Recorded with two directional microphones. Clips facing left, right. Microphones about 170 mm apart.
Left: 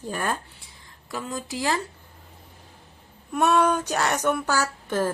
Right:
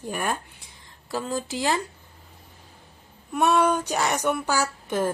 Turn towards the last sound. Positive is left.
turn(degrees=-15)  # may be behind; listen again after turning